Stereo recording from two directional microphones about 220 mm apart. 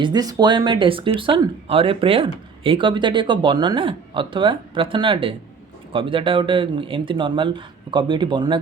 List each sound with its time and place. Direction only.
0.0 s speech: 20° right (ahead or behind)